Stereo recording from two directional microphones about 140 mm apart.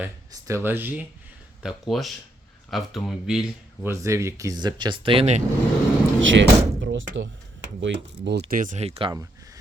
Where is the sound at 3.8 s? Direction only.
20° right (ahead or behind); by 5.4 s 45° right (ahead or behind).